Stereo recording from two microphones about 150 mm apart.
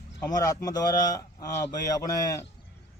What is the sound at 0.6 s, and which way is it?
Speech, 25° left (ahead or behind).